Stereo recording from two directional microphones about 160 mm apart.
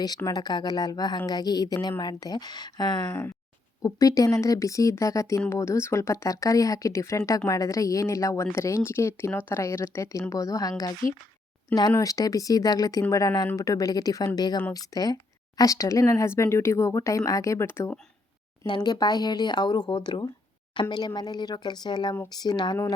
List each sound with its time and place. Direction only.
0.2 s speech: 25° left (ahead or behind)
3.1 s speech: 15° left (ahead or behind)
18.6 s speech: 25° left (ahead or behind)